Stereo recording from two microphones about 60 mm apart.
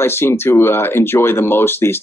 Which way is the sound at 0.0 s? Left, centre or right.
Left.